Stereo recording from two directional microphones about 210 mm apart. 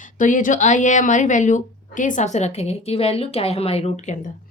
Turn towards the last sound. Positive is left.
turn(degrees=35)  # may be behind; listen again after turning